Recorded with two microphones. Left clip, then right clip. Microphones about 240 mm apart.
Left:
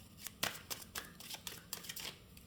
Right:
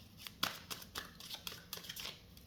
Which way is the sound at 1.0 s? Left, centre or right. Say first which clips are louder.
Right 1 dB; centre.